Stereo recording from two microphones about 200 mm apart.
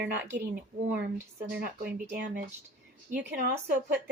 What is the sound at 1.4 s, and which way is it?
Speech, 50° right (ahead or behind).